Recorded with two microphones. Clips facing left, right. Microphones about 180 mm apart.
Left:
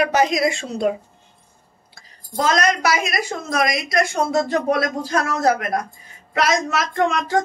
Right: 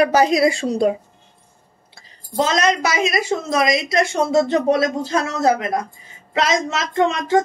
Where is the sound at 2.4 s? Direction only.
25° right (ahead or behind).